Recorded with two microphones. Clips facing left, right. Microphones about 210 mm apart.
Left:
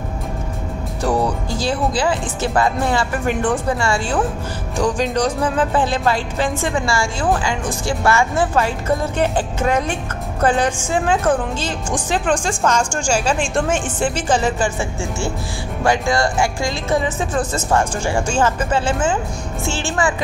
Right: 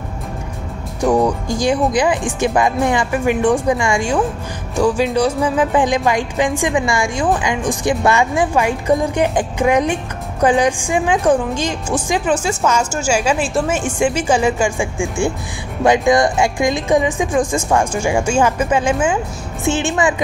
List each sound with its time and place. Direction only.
1.5 s a woman's voice: 15° right (ahead or behind)